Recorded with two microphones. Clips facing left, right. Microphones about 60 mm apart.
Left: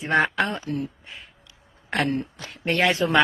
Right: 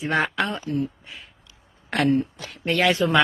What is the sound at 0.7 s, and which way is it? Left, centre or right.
Speech, centre.